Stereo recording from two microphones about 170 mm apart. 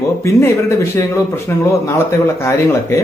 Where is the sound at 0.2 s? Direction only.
15° left (ahead or behind).